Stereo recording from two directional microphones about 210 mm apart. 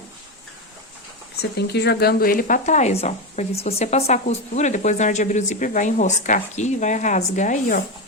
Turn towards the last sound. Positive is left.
turn(degrees=35)  # may be behind; listen again after turning